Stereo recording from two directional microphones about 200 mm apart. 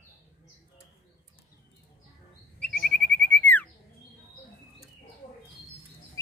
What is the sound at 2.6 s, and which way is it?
Bird, 5° left (ahead or behind).